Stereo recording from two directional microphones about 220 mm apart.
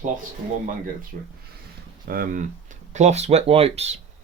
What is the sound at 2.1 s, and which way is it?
Speech, 40° right (ahead or behind).